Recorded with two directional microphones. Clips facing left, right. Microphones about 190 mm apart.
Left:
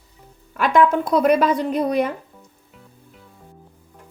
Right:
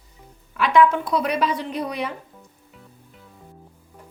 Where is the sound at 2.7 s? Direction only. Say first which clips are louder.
Left 1 dB; centre (ahead or behind).